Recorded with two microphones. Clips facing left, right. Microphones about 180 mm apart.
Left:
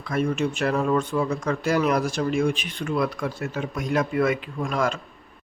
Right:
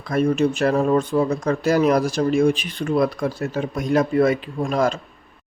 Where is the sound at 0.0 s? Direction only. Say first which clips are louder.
Right 5 dB; 35° right (ahead or behind).